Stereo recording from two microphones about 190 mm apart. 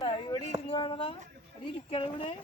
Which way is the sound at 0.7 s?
25° left (ahead or behind).